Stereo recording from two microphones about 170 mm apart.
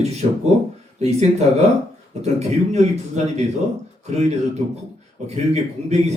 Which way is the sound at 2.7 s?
40° right (ahead or behind).